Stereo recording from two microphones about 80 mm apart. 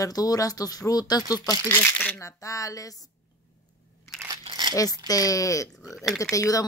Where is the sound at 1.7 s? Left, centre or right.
Left.